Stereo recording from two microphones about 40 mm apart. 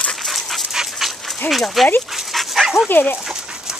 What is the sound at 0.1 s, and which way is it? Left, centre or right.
Dog, centre.